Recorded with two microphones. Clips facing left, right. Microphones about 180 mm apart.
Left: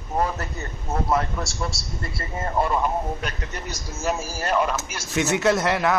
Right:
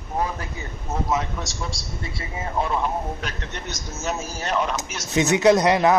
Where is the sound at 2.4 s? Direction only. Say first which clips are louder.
Left 2 dB; centre (ahead or behind).